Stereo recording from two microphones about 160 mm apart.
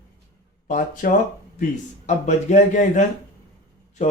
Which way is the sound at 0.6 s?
55° left (ahead or behind).